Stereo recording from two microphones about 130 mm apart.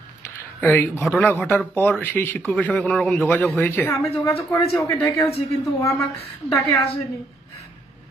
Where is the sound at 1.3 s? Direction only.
15° left (ahead or behind).